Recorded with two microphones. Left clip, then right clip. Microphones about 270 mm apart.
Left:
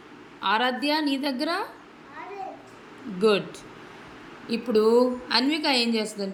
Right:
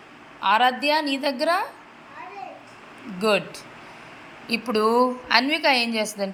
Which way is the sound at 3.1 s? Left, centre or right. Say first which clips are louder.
Even; centre.